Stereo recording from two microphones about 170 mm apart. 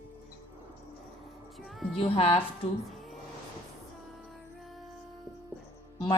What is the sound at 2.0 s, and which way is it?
Speech, 35° left (ahead or behind).